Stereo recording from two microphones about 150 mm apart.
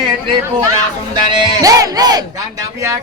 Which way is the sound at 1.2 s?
30° right (ahead or behind).